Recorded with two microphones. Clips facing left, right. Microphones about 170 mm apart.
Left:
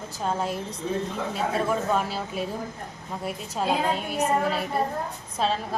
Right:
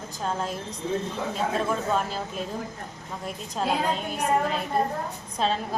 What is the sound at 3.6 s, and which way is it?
Speech, 5° left (ahead or behind).